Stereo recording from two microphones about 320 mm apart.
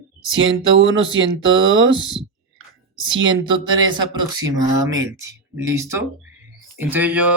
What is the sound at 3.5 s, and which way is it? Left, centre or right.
Speech, centre.